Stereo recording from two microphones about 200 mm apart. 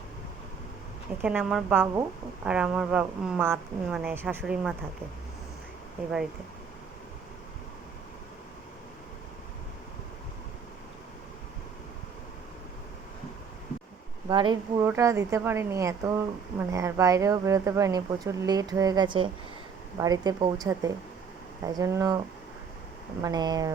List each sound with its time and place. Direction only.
1.2 s speech: 5° right (ahead or behind)
14.3 s speech: 20° right (ahead or behind)
23.2 s speech: 20° right (ahead or behind)